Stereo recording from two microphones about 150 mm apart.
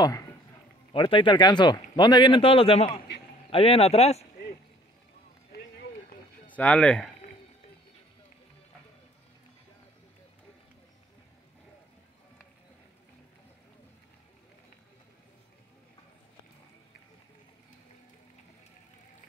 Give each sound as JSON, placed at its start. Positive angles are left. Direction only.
{"t": 0.9, "sound": "speech", "side_deg": 35}
{"t": 5.5, "sound": "run", "side_deg": 90}
{"t": 6.5, "sound": "speech", "side_deg": 10}